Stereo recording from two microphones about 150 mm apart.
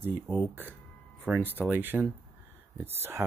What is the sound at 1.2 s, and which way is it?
Speech, 10° right (ahead or behind).